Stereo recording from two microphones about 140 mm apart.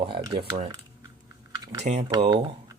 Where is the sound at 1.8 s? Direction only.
60° right (ahead or behind).